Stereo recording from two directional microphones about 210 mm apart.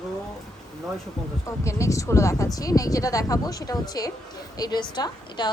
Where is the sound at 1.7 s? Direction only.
15° left (ahead or behind).